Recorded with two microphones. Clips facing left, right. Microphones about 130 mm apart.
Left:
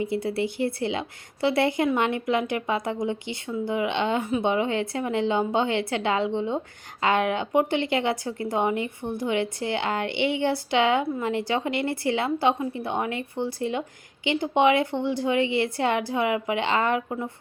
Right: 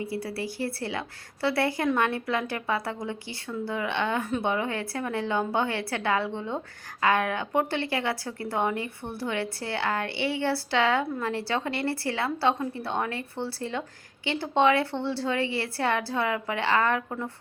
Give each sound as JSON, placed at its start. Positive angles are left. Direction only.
{"t": 0.0, "sound": "speech", "side_deg": 20}